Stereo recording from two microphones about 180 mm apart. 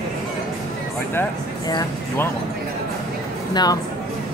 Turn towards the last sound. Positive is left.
turn(degrees=20)  # may be behind; listen again after turning